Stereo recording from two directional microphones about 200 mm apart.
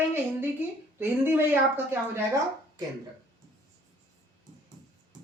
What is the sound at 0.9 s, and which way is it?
A woman's voice, 10° right (ahead or behind).